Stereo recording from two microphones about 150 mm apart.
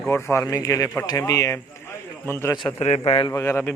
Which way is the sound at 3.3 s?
20° left (ahead or behind).